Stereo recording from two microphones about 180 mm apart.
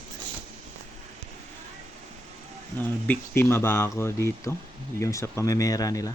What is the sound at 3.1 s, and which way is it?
Speech, 15° left (ahead or behind).